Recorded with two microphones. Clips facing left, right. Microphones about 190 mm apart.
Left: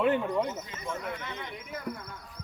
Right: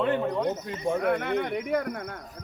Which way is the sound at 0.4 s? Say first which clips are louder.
Right 8 dB; 55° right (ahead or behind).